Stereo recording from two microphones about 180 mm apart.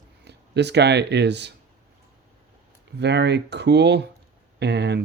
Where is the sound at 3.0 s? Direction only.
70° right (ahead or behind).